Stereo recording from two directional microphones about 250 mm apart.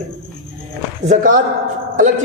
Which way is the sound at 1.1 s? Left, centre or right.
Right.